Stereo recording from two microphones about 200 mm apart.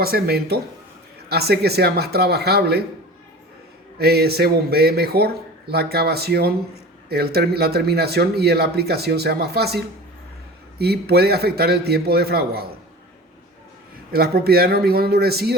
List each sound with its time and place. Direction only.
0.0 s speech: 50° right (ahead or behind)
3.9 s speech: 50° right (ahead or behind)
14.1 s speech: 50° right (ahead or behind)